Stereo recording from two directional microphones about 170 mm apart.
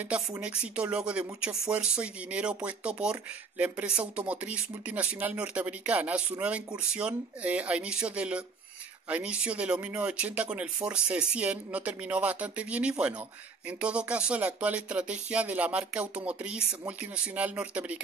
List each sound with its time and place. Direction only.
0.0 s speech: 10° right (ahead or behind)